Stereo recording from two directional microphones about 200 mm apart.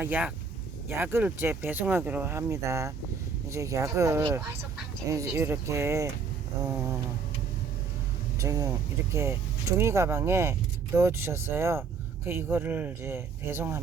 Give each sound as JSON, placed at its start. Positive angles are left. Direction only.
{"t": 0.0, "sound": "speech", "side_deg": -5}
{"t": 8.4, "sound": "speech", "side_deg": -15}